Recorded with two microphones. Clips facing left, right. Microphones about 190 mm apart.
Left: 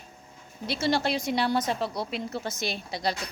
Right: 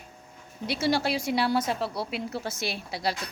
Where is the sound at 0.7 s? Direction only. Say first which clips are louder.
Even; 10° right (ahead or behind).